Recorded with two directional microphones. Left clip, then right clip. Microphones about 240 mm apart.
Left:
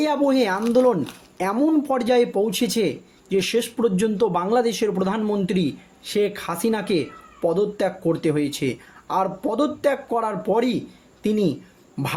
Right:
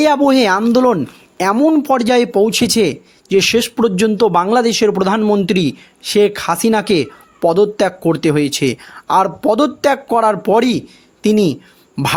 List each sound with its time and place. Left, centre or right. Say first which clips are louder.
0.0 s speech: right 8 dB; right